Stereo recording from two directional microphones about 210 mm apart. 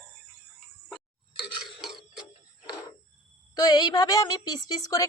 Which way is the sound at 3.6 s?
20° left (ahead or behind).